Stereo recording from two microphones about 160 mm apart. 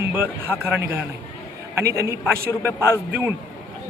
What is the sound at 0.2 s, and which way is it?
Speech, 10° right (ahead or behind).